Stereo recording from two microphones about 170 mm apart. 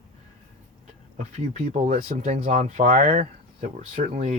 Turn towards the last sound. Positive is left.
turn(degrees=-45)  # may be behind; listen again after turning